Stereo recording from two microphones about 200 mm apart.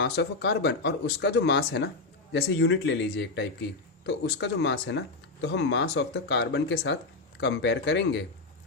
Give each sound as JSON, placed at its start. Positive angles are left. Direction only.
{"t": 0.0, "sound": "speech", "side_deg": 60}